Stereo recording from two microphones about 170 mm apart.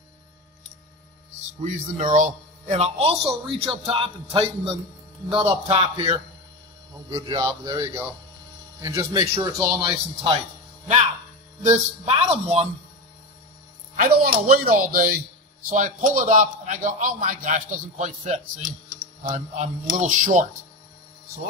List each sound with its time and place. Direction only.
1.6 s a man's voice: 45° right (ahead or behind)
7.1 s a man's voice: 15° right (ahead or behind)
11.6 s a man's voice: 40° right (ahead or behind)
13.9 s a man's voice: 60° right (ahead or behind)